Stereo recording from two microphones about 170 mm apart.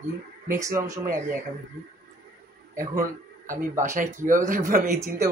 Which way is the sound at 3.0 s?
50° right (ahead or behind).